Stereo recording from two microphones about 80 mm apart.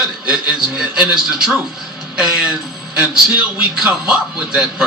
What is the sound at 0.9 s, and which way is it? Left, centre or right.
A man's voice, centre.